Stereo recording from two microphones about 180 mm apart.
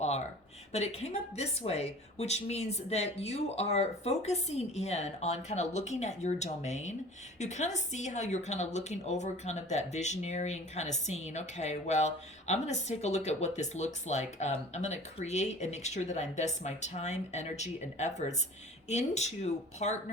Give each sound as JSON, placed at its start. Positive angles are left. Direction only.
{"t": 0.7, "sound": "a woman's voice", "side_deg": 35}